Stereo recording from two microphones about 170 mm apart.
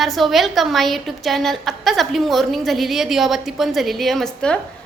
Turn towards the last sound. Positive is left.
turn(degrees=5)  # may be behind; listen again after turning